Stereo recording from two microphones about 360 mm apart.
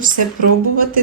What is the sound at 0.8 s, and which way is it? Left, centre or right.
Speech, right.